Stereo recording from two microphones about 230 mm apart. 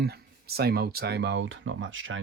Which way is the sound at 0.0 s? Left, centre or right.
Right.